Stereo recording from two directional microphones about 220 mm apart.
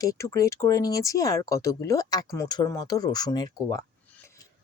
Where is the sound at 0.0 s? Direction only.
15° left (ahead or behind).